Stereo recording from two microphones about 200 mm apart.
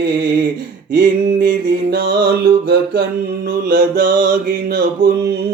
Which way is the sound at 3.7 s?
50° right (ahead or behind).